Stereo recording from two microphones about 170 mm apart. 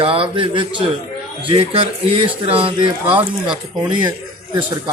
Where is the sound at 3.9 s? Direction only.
30° right (ahead or behind).